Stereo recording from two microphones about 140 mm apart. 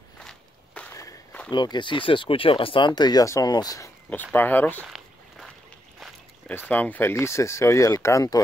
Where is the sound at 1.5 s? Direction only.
35° left (ahead or behind).